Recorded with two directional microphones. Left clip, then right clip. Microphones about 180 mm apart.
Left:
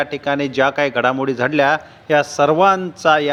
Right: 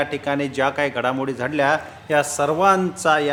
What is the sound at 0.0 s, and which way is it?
A man's voice, 30° left (ahead or behind).